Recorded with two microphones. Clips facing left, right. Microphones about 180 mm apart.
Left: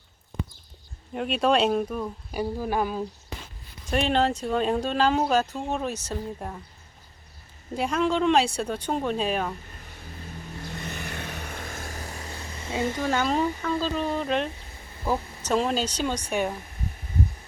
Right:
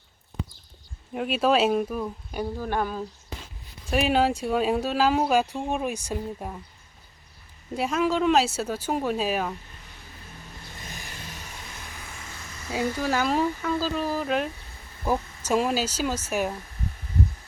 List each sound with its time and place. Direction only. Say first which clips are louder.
1.1 s speech: even; centre (ahead or behind)
3.8 s speech: right 1 dB; 5° right (ahead or behind)
7.8 s speech: even; 5° right (ahead or behind)
10.8 s vehicle: left 4 dB; 65° left (ahead or behind); by 12.7 s 30° left (ahead or behind)
13.0 s speech: even; centre (ahead or behind)